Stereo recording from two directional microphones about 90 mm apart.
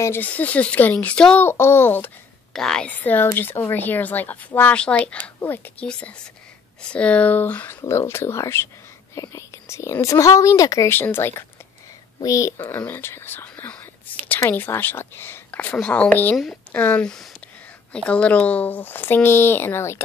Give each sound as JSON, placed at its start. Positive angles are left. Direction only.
{"t": 0.2, "sound": "speech", "side_deg": 15}
{"t": 1.4, "sound": "speech", "side_deg": 25}
{"t": 2.5, "sound": "speech", "side_deg": 5}
{"t": 3.0, "sound": "speech", "side_deg": 20}
{"t": 5.9, "sound": "speech", "side_deg": 10}
{"t": 9.1, "sound": "speech", "side_deg": 40}
{"t": 10.9, "sound": "speech", "side_deg": 25}
{"t": 12.2, "sound": "speech", "side_deg": 40}
{"t": 12.7, "sound": "speech", "side_deg": 25}
{"t": 17.0, "sound": "speech", "side_deg": 5}